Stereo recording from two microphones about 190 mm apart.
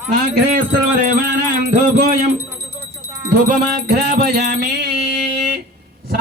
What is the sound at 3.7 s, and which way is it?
Music, 55° right (ahead or behind).